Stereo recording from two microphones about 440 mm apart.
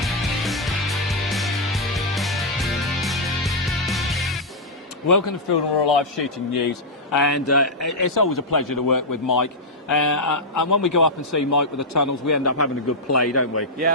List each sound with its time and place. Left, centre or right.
0.0 s music: centre
5.0 s a man's voice: left